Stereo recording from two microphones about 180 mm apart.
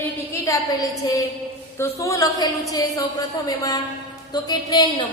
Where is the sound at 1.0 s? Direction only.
20° left (ahead or behind).